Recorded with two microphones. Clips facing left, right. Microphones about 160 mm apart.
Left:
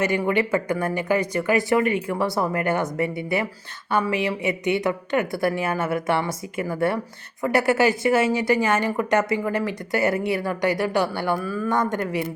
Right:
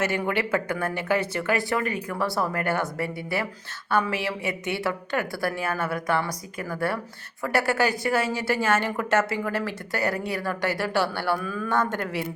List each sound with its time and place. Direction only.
0.0 s speech: 10° left (ahead or behind)
1.8 s speech: 40° right (ahead or behind)
2.0 s a woman's voice: 20° left (ahead or behind)
11.4 s speech: 5° left (ahead or behind)